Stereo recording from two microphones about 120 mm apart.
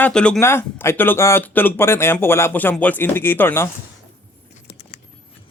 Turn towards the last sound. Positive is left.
turn(degrees=50)  # may be behind; listen again after turning